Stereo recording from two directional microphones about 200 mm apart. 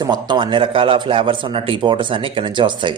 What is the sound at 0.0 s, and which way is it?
A man's voice, 20° right (ahead or behind).